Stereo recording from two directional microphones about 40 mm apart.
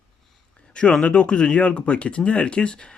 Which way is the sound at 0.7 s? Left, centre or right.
Left.